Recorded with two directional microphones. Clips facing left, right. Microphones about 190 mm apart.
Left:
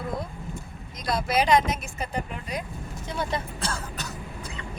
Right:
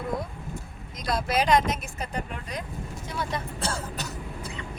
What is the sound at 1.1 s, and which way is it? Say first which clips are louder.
Speech: left 1 dB; centre (ahead or behind).